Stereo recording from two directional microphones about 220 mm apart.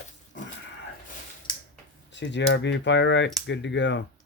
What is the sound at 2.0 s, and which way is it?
Speech, 55° left (ahead or behind).